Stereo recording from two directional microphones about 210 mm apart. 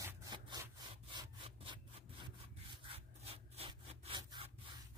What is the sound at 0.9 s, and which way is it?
Sawing, 20° right (ahead or behind).